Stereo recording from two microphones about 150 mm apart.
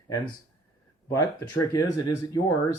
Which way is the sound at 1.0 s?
25° left (ahead or behind).